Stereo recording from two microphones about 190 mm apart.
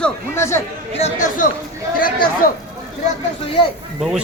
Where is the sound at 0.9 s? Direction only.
35° left (ahead or behind).